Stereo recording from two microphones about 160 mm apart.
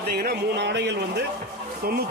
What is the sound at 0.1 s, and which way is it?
Speech, 70° right (ahead or behind).